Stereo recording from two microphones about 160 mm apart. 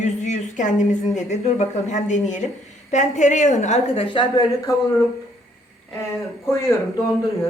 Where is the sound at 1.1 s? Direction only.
45° left (ahead or behind); by 4.7 s 25° left (ahead or behind).